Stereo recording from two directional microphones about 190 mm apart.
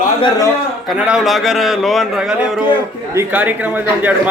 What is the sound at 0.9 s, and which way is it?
A man's voice, 5° right (ahead or behind).